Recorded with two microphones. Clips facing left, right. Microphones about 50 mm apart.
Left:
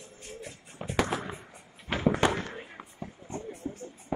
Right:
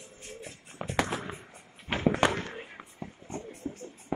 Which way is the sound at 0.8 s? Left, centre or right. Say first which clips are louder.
Right 1 dB; right.